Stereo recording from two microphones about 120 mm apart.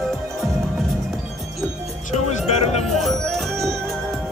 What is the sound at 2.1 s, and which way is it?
Speech, 70° left (ahead or behind).